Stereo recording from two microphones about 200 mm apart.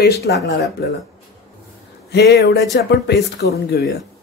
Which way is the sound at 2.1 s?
55° left (ahead or behind).